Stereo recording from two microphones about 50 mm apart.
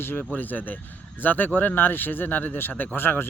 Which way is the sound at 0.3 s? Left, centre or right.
Left.